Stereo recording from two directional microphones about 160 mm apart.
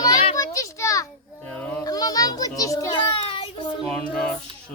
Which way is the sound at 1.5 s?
10° left (ahead or behind).